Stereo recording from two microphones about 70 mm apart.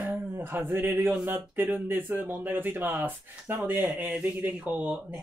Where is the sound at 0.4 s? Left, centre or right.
Right.